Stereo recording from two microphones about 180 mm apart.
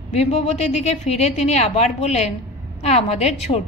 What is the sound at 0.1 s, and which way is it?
A woman's voice, 35° left (ahead or behind).